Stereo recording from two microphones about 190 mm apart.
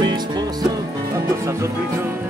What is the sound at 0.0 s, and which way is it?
Music, 20° right (ahead or behind).